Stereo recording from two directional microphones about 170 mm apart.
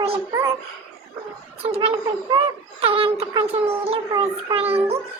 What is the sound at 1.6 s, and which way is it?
A child's voice, 35° right (ahead or behind).